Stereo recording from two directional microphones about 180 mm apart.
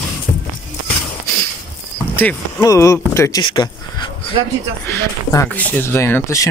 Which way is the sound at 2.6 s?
15° left (ahead or behind).